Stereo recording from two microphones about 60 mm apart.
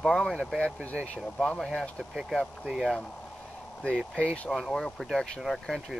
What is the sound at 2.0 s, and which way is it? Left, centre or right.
Speech, centre.